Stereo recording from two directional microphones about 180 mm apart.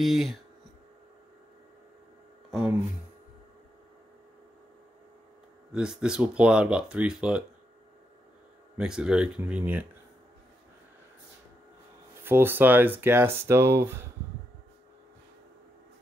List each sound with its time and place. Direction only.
0.0 s speech: centre (ahead or behind)
5.7 s speech: 5° right (ahead or behind)
8.7 s speech: 5° right (ahead or behind)
12.2 s speech: 10° right (ahead or behind)